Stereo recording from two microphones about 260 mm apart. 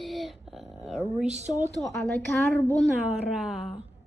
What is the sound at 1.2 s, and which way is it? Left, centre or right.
Speech, right.